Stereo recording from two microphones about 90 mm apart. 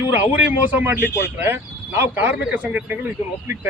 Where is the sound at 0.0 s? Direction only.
20° right (ahead or behind).